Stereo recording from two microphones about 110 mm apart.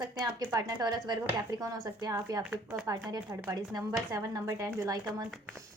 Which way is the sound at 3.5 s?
35° right (ahead or behind).